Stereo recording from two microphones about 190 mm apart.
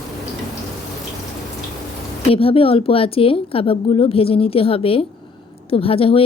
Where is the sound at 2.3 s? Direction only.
30° left (ahead or behind).